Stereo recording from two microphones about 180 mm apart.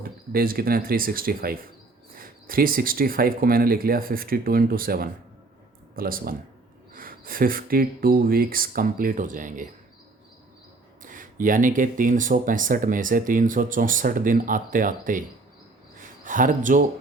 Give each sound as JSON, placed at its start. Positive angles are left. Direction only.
{"t": 0.0, "sound": "speech", "side_deg": -55}
{"t": 11.0, "sound": "speech", "side_deg": -50}